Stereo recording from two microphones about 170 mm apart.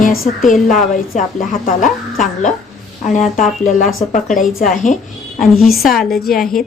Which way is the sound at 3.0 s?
45° left (ahead or behind).